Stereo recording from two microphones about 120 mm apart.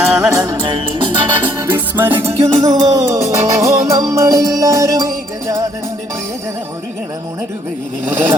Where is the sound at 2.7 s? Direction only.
30° right (ahead or behind).